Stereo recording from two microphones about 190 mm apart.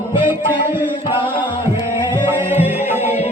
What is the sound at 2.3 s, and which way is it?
Music, 10° right (ahead or behind).